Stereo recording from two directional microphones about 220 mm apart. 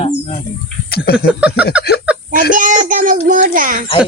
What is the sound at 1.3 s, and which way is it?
Speech, 5° right (ahead or behind).